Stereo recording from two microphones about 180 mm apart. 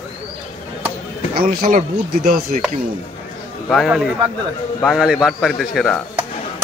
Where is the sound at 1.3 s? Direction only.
55° right (ahead or behind).